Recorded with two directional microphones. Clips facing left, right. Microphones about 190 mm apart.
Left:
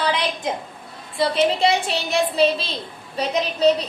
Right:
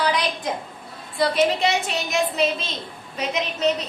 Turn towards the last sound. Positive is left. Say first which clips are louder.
# left 4 dB
turn(degrees=35)  # may be behind; listen again after turning